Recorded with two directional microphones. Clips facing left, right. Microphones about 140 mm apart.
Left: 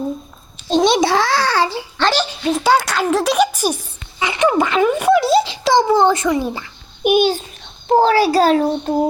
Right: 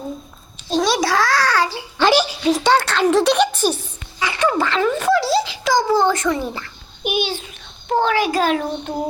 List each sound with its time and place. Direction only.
0.7 s a sound: 25° left (ahead or behind)
2.0 s speech: 10° right (ahead or behind)
2.5 s a child's voice: 5° left (ahead or behind)
7.0 s a child's voice: 45° left (ahead or behind)
7.9 s a child's voice: 35° left (ahead or behind)